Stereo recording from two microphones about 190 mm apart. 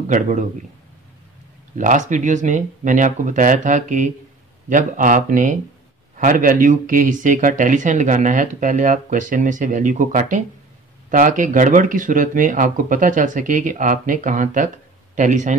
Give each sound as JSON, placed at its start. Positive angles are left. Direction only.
{"t": 0.1, "sound": "speech", "side_deg": -40}
{"t": 1.8, "sound": "speech", "side_deg": -40}